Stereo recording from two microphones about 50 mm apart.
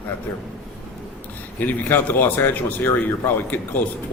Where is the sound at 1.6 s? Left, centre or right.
Left.